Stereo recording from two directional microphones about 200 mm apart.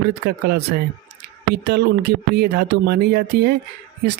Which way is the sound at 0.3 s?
55° right (ahead or behind).